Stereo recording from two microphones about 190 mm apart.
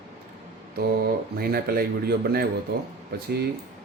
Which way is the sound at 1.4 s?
55° right (ahead or behind).